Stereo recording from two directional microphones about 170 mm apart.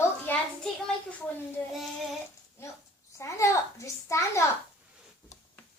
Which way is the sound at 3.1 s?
15° left (ahead or behind).